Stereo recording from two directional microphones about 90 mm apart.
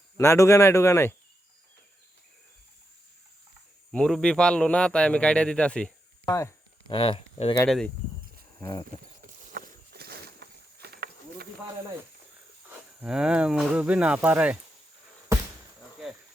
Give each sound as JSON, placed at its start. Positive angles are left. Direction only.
{"t": 0.2, "sound": "speech", "side_deg": 35}
{"t": 3.9, "sound": "a man's voice", "side_deg": 10}
{"t": 6.2, "sound": "speech", "side_deg": 35}
{"t": 6.8, "sound": "speech", "side_deg": 70}
{"t": 8.6, "sound": "speech", "side_deg": 30}
{"t": 13.0, "sound": "speech", "side_deg": -10}